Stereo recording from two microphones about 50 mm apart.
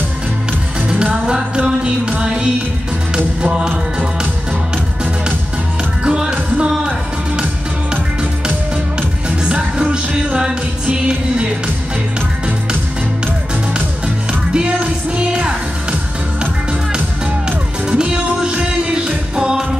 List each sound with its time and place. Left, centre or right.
0.8 s music: right
6.0 s music: centre
9.4 s music: centre
13.7 s music: centre
17.5 s music: centre